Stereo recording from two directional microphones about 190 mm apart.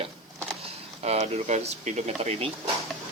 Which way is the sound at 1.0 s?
35° right (ahead or behind).